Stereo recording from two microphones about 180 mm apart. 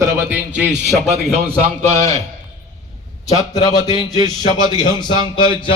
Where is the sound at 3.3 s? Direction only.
20° left (ahead or behind).